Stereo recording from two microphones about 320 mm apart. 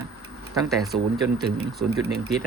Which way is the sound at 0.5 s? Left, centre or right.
Centre.